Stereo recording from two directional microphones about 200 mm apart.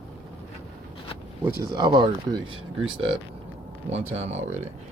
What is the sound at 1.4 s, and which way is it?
Speech, 20° right (ahead or behind).